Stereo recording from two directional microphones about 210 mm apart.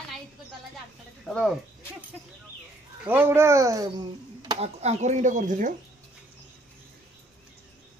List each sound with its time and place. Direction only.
1.2 s speech: centre (ahead or behind)
3.0 s speech: 10° right (ahead or behind); by 5.8 s 35° right (ahead or behind)